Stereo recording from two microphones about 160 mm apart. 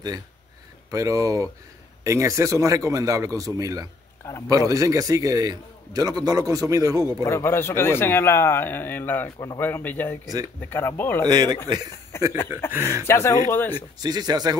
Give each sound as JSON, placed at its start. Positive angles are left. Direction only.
{"t": 0.9, "sound": "a man's voice", "side_deg": -20}
{"t": 7.2, "sound": "speech", "side_deg": 15}
{"t": 11.2, "sound": "a man's voice", "side_deg": -25}
{"t": 12.1, "sound": "speech", "side_deg": 15}
{"t": 13.9, "sound": "a man's voice", "side_deg": -25}